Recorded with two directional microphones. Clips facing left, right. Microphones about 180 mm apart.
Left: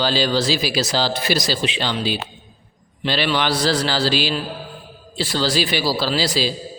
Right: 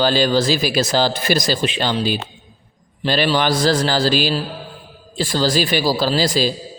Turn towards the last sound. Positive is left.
turn(degrees=-45)  # may be behind; listen again after turning